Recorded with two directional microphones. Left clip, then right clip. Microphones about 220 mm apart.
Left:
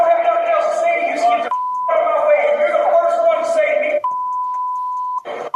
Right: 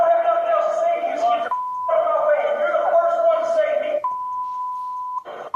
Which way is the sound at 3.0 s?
40° left (ahead or behind).